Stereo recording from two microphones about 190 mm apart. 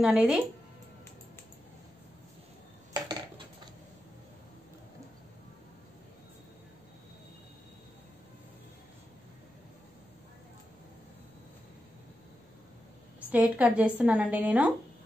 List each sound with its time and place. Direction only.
0.0 s speech: 5° right (ahead or behind)
2.9 s dishes: 25° right (ahead or behind)
13.3 s a woman's voice: 5° right (ahead or behind)